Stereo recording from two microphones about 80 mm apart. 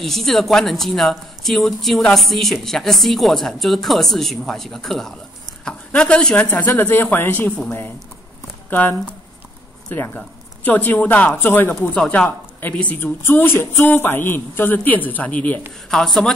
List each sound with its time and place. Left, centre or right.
0.0 s speech: centre
6.8 s speech: left
8.6 s speech: left
11.9 s speech: centre
12.3 s a sound: left
12.7 s speech: centre
13.0 s speech: left
15.9 s speech: centre